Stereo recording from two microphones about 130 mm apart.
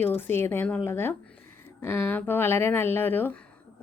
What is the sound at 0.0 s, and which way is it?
Speech, 15° left (ahead or behind).